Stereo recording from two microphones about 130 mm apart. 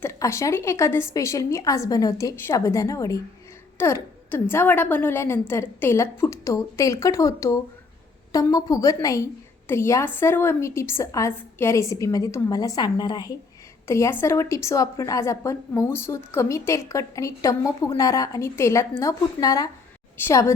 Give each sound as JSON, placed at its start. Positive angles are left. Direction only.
{"t": 0.0, "sound": "a woman's voice", "side_deg": 20}
{"t": 13.8, "sound": "a woman's voice", "side_deg": 20}